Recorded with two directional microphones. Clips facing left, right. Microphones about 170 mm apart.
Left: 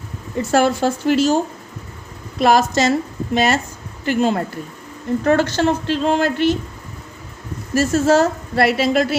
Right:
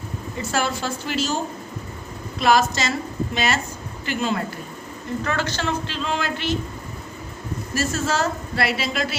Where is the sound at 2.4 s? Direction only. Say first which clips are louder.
Left 4 dB; 50° left (ahead or behind).